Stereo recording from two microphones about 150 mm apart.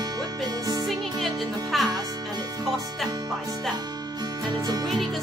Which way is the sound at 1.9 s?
25° right (ahead or behind).